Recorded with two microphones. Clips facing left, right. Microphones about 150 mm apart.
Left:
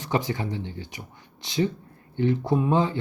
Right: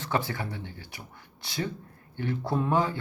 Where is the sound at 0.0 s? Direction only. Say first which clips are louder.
Left 3 dB; 15° left (ahead or behind).